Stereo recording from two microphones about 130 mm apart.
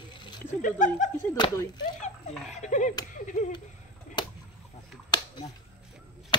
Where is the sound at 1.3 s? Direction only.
30° left (ahead or behind).